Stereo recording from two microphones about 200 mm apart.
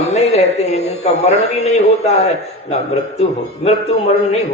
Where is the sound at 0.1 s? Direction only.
35° left (ahead or behind).